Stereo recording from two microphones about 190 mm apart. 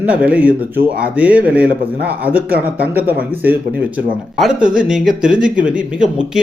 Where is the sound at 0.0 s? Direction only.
5° right (ahead or behind).